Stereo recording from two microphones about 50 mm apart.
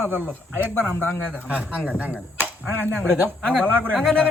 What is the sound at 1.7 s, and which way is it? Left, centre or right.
Speech, centre.